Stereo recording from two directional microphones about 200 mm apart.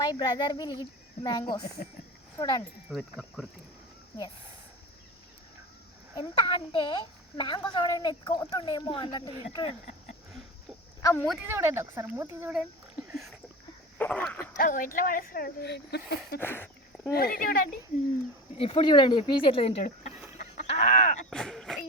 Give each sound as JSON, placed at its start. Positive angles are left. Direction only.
{"t": 0.0, "sound": "a woman's voice", "side_deg": 20}
{"t": 2.9, "sound": "speech", "side_deg": 0}
{"t": 6.1, "sound": "a woman's voice", "side_deg": 20}
{"t": 11.0, "sound": "speech", "side_deg": 10}
{"t": 11.4, "sound": "speech", "side_deg": -15}
{"t": 14.0, "sound": "speech", "side_deg": 5}
{"t": 14.5, "sound": "speech", "side_deg": 40}
{"t": 16.4, "sound": "a sound", "side_deg": 10}
{"t": 17.1, "sound": "speech", "side_deg": 50}
{"t": 18.5, "sound": "a woman's voice", "side_deg": 25}
{"t": 20.4, "sound": "fowl", "side_deg": 35}
{"t": 21.2, "sound": "speech", "side_deg": 0}